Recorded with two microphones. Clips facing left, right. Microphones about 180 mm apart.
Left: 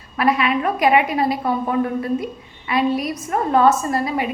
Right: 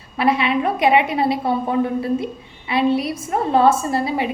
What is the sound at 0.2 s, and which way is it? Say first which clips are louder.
A woman's voice: even; 25° right (ahead or behind).